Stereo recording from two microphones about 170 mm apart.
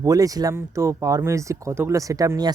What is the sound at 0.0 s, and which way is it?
Speech, 20° right (ahead or behind).